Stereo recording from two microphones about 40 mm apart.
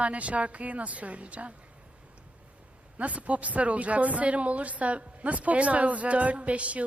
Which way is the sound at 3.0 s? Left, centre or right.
Right.